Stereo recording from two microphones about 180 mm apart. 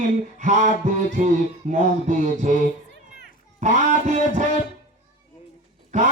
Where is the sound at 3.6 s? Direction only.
45° right (ahead or behind).